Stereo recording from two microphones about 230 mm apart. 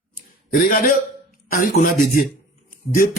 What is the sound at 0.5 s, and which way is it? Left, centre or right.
A man's voice, left.